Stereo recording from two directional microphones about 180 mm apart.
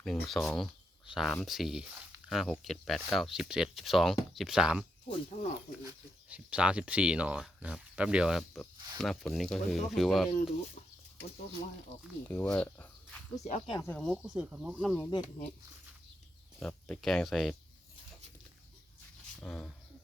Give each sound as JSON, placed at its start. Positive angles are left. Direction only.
{"t": 0.0, "sound": "speech", "side_deg": 0}
{"t": 5.0, "sound": "speech", "side_deg": 30}
{"t": 5.8, "sound": "speech", "side_deg": -5}
{"t": 12.3, "sound": "speech", "side_deg": 10}
{"t": 13.3, "sound": "speech", "side_deg": 35}
{"t": 13.7, "sound": "speech", "side_deg": 10}
{"t": 14.0, "sound": "speech", "side_deg": -5}
{"t": 16.6, "sound": "speech", "side_deg": 5}
{"t": 19.4, "sound": "speech", "side_deg": 5}